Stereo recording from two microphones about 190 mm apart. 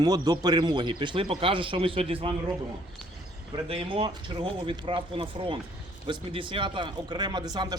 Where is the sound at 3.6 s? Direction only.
30° right (ahead or behind).